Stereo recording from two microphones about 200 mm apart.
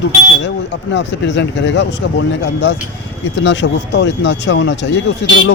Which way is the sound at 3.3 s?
65° left (ahead or behind).